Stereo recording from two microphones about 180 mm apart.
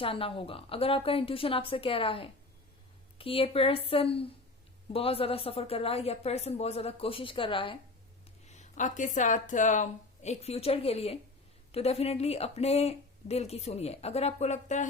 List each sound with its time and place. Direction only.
0.0 s speech: 30° left (ahead or behind)
8.4 s speech: 40° left (ahead or behind)